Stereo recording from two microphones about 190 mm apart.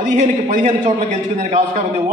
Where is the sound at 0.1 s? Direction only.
40° right (ahead or behind).